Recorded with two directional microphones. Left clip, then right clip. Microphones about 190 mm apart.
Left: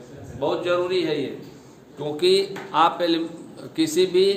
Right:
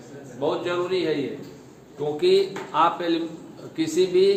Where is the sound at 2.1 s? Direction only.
50° left (ahead or behind).